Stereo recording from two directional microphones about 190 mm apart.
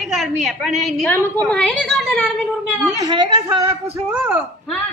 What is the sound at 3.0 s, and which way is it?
Speech, 20° right (ahead or behind).